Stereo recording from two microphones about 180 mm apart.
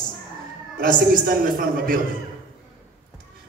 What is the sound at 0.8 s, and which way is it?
A man's voice, 55° right (ahead or behind).